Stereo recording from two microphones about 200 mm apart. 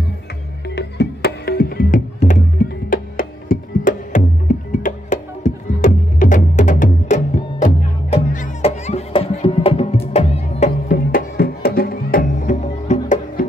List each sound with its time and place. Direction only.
0.7 s music: 55° left (ahead or behind); by 13.5 s 35° left (ahead or behind)